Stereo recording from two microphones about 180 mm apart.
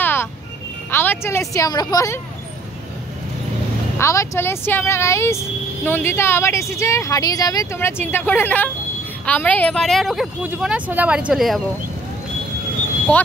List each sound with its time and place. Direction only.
0.0 s music: 10° left (ahead or behind)
0.9 s a woman's voice: 15° left (ahead or behind)
4.0 s speech: 15° left (ahead or behind); by 11.6 s centre (ahead or behind)